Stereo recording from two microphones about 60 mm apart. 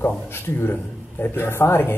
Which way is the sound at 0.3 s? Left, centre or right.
Left.